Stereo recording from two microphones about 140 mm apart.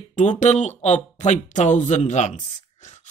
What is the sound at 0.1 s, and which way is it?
Speech, 55° left (ahead or behind).